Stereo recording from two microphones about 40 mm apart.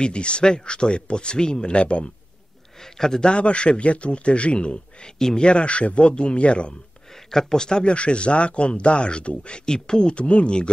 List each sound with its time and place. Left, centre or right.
0.0 s speech: left
2.8 s a man's voice: centre
3.3 s speech: left
7.2 s speech: centre